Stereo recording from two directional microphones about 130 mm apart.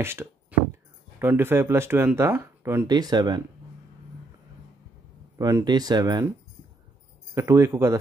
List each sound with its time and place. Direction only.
0.0 s music: 20° right (ahead or behind)
1.2 s speech: 15° right (ahead or behind)
2.9 s speech: 30° right (ahead or behind)
5.4 s speech: 30° right (ahead or behind)
7.3 s speech: 25° right (ahead or behind)